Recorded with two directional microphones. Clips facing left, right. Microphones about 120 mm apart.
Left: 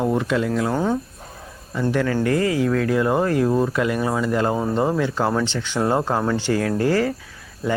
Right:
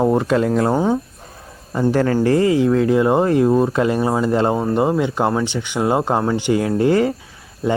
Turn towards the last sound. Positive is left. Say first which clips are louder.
# right 4 dB
turn(degrees=-25)  # may be behind; listen again after turning